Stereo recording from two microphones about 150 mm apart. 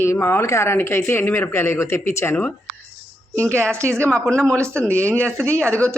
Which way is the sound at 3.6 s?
5° left (ahead or behind).